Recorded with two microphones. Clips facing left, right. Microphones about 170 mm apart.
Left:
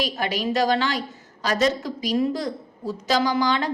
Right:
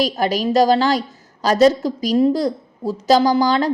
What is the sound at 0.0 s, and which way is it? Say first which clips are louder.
A woman's voice: right 7 dB; 40° right (ahead or behind).